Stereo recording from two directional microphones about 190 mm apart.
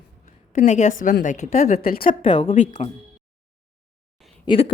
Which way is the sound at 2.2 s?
25° left (ahead or behind).